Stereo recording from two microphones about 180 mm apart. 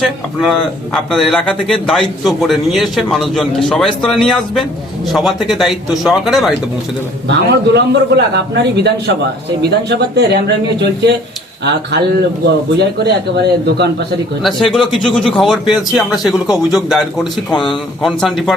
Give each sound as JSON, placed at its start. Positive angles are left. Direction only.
{"t": 0.0, "sound": "speech", "side_deg": 0}
{"t": 7.3, "sound": "a man's voice", "side_deg": -70}
{"t": 13.3, "sound": "a man's voice", "side_deg": -70}
{"t": 14.4, "sound": "speech", "side_deg": 0}